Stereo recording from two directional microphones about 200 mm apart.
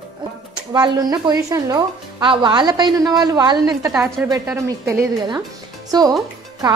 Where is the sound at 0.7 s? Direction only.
20° right (ahead or behind).